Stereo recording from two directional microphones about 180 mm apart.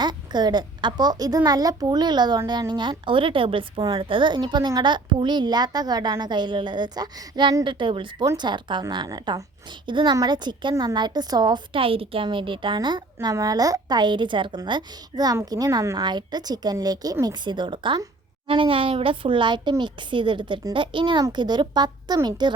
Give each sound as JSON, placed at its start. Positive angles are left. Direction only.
{"t": 0.0, "sound": "a woman's voice", "side_deg": -25}